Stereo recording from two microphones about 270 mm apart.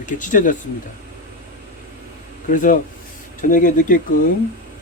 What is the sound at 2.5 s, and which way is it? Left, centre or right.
Speech, left.